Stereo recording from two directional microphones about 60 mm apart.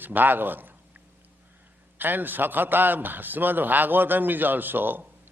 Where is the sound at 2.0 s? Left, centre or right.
Right.